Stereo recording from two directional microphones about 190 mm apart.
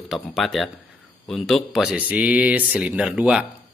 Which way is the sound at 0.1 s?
Centre (ahead or behind).